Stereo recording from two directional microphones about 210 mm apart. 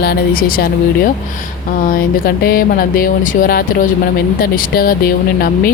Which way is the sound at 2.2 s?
45° left (ahead or behind).